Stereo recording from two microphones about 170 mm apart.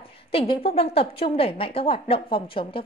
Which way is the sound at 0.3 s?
35° left (ahead or behind).